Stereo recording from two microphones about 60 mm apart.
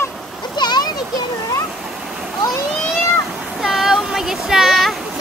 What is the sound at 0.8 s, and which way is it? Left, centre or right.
Children playing, left.